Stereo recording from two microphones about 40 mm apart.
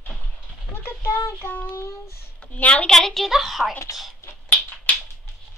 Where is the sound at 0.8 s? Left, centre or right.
Left.